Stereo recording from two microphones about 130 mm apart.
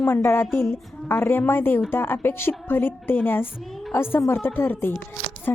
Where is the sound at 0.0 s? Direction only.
20° left (ahead or behind).